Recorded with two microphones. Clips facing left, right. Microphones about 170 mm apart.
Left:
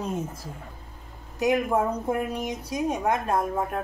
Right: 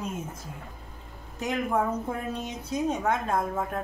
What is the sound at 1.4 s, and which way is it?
A woman's voice, 15° left (ahead or behind).